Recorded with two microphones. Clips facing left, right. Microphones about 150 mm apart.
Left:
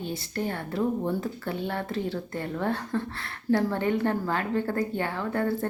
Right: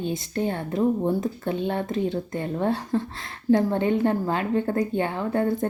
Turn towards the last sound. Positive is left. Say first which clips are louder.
# right 4 dB
turn(degrees=-20)  # may be behind; listen again after turning